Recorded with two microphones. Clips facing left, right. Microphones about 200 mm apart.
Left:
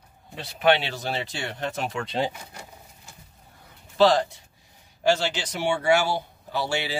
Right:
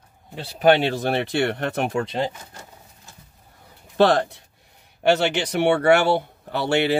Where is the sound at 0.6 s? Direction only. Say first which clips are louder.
Right 5 dB; 45° right (ahead or behind); by 2.0 s 60° right (ahead or behind).